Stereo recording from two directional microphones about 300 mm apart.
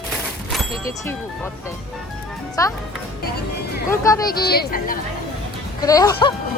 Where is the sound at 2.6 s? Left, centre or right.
Centre.